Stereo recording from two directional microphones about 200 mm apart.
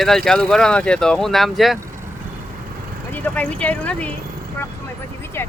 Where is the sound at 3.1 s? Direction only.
10° left (ahead or behind).